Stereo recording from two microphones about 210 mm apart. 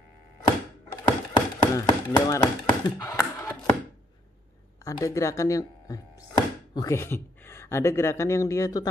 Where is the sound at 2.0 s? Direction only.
15° left (ahead or behind).